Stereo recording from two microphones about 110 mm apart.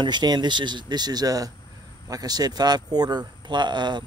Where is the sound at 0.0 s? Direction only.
40° right (ahead or behind).